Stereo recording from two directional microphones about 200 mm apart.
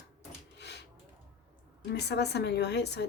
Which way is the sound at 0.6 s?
55° left (ahead or behind).